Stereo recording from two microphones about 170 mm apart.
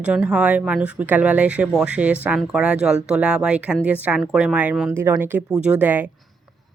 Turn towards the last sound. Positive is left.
turn(degrees=-10)  # may be behind; listen again after turning